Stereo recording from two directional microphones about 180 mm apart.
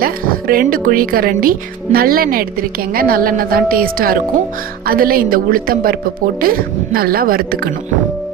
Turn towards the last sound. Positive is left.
turn(degrees=-55)  # may be behind; listen again after turning